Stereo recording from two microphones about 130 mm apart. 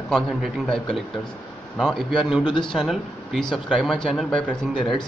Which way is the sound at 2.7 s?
Centre (ahead or behind).